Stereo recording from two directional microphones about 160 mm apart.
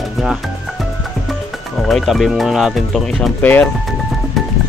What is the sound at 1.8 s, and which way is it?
Speech, centre (ahead or behind).